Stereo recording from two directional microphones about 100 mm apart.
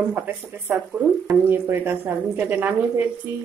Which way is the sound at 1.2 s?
20° right (ahead or behind).